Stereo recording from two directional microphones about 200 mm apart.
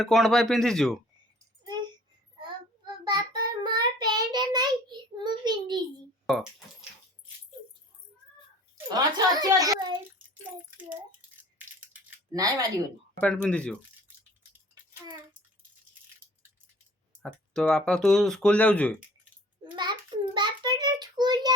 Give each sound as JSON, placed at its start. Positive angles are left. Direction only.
{"t": 0.0, "sound": "speech", "side_deg": 0}
{"t": 3.0, "sound": "child singing", "side_deg": -20}
{"t": 6.3, "sound": "speech", "side_deg": 0}
{"t": 8.9, "sound": "a woman's voice", "side_deg": -20}
{"t": 12.3, "sound": "speech", "side_deg": -15}
{"t": 13.1, "sound": "speech", "side_deg": 5}
{"t": 17.2, "sound": "speech", "side_deg": 5}
{"t": 19.7, "sound": "child singing", "side_deg": -20}